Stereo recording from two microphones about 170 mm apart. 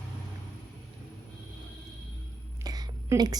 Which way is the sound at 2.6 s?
25° right (ahead or behind).